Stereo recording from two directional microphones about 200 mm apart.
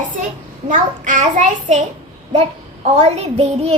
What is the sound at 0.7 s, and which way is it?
A child's voice, 40° right (ahead or behind).